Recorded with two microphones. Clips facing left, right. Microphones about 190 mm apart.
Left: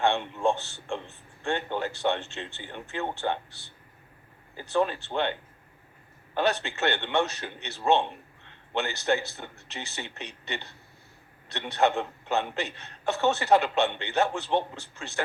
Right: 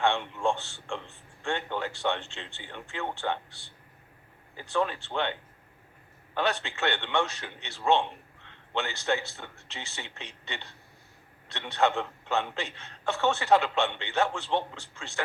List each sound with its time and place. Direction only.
0.0 s speech: 20° left (ahead or behind)
4.6 s speech: 20° left (ahead or behind)
6.4 s speech: 20° left (ahead or behind)